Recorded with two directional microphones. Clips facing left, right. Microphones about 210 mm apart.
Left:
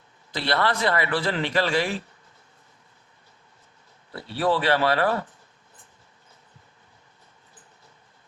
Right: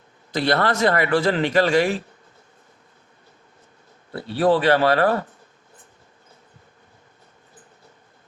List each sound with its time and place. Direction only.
0.3 s speech: 50° right (ahead or behind)
4.2 s speech: 50° right (ahead or behind)